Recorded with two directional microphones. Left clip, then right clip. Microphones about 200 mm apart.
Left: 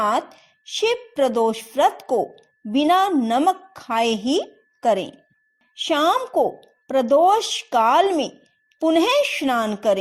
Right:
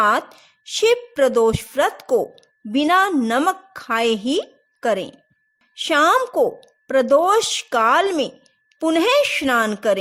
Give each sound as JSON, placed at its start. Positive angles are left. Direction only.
{"t": 0.0, "sound": "a woman's voice", "side_deg": -10}